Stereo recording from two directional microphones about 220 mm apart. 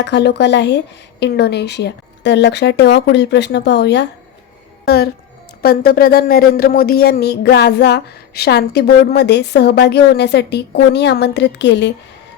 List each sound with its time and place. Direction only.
0.0 s speech: 50° left (ahead or behind)
5.6 s speech: 40° left (ahead or behind)